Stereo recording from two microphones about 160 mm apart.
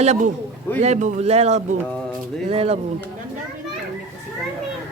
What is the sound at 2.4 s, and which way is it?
Speech, 40° right (ahead or behind).